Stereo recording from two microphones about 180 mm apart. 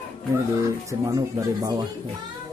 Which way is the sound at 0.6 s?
20° right (ahead or behind).